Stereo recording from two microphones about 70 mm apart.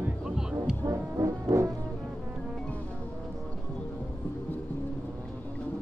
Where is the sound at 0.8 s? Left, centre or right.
Right.